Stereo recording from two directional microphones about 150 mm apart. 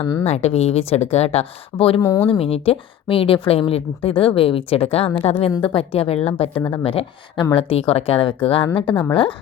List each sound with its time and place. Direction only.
0.0 s a woman's voice: 25° left (ahead or behind)
0.3 s a woman's voice: 45° left (ahead or behind)
2.0 s a woman's voice: 20° left (ahead or behind)
2.2 s a woman's voice: 40° left (ahead or behind)